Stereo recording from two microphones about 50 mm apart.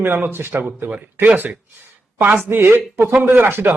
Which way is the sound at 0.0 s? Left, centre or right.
Right.